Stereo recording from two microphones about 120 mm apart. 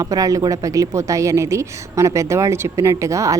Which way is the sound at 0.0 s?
30° right (ahead or behind).